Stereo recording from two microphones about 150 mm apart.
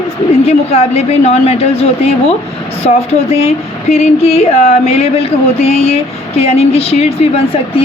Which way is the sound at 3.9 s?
45° left (ahead or behind).